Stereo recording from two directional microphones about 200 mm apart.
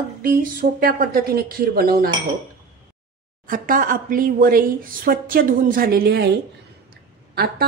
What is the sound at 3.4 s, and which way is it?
A woman's voice, 45° right (ahead or behind).